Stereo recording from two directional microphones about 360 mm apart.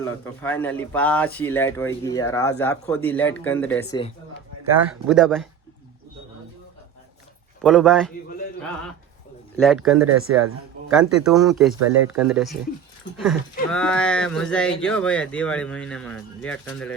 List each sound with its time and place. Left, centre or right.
0.0 s speech: centre
7.6 s speech: centre
9.6 s speech: centre
10.2 s speech: right
10.9 s speech: centre